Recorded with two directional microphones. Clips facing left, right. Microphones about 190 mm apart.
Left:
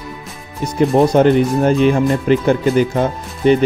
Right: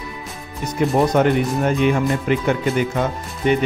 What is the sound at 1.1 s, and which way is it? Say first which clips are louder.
Speech: left 5 dB; 30° left (ahead or behind).